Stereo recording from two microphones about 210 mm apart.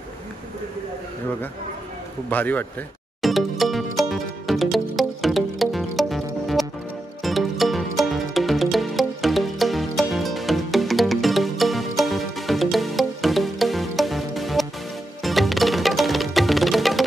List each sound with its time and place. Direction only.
2.2 s a man's voice: 10° left (ahead or behind)
3.2 s music: centre (ahead or behind)